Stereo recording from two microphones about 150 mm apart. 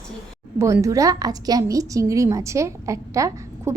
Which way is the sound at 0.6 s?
20° right (ahead or behind).